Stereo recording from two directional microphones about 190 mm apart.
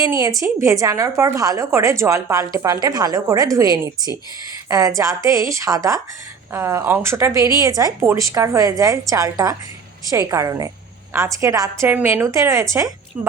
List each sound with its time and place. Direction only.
0.0 s a woman's voice: 15° right (ahead or behind)